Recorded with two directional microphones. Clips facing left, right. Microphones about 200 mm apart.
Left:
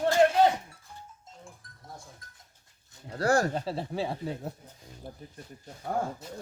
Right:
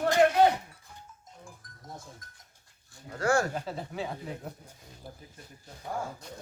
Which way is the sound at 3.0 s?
35° left (ahead or behind).